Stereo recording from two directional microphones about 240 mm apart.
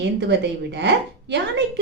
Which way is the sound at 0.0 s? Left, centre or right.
Right.